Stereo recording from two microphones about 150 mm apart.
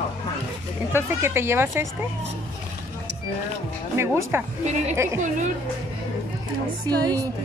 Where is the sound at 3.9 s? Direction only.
15° right (ahead or behind).